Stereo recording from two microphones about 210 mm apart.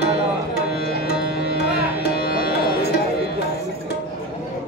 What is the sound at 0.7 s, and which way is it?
Music, 50° left (ahead or behind).